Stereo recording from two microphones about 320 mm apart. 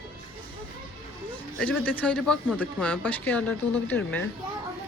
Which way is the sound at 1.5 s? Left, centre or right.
Centre.